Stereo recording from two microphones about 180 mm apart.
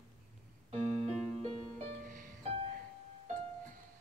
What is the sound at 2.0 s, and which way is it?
Music, 50° right (ahead or behind).